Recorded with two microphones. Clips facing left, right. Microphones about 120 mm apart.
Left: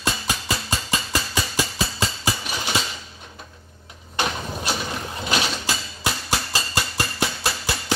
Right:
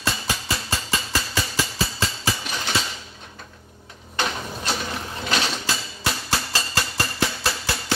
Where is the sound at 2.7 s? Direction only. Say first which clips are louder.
Left 1 dB; 15° left (ahead or behind).